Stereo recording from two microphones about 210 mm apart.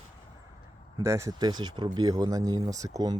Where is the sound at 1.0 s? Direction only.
15° right (ahead or behind).